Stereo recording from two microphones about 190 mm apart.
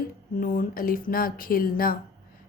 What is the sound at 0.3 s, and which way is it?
Speech, 50° left (ahead or behind).